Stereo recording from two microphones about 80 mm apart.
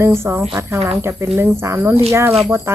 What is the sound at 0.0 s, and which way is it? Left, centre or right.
Speech, right.